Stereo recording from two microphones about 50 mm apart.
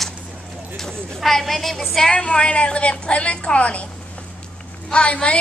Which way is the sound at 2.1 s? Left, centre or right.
Centre.